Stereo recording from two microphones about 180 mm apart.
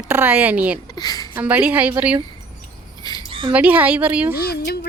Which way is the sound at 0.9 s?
20° left (ahead or behind).